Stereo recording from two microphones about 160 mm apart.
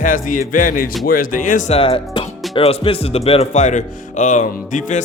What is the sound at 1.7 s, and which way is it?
Speech, 35° left (ahead or behind).